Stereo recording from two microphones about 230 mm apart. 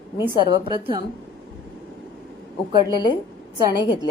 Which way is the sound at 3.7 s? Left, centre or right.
Centre.